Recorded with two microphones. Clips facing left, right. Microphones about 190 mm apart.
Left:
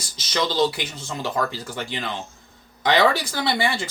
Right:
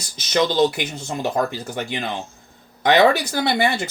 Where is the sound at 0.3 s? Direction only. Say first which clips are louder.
Right 4 dB; 50° right (ahead or behind).